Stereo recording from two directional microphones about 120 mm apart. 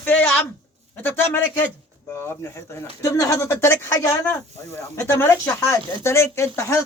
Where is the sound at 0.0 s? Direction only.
15° left (ahead or behind).